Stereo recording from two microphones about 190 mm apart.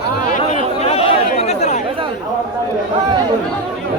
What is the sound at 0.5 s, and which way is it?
Chatter, 35° left (ahead or behind).